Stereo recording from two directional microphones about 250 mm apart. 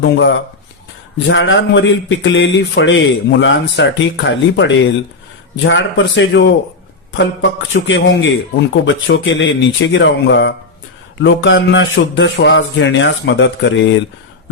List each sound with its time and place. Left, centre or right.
0.0 s speech: left